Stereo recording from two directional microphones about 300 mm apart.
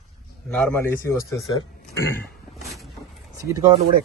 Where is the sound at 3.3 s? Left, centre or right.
Centre.